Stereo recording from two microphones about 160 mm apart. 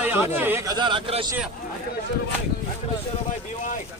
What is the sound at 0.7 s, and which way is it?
Speech, 30° right (ahead or behind).